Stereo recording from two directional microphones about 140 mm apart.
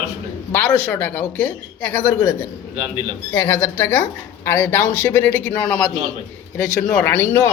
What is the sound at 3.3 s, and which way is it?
A woman's voice, 15° left (ahead or behind).